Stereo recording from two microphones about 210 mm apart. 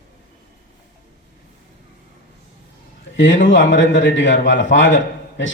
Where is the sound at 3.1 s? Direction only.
65° left (ahead or behind).